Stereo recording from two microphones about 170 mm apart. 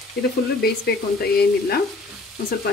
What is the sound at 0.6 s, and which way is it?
Speech, 70° left (ahead or behind).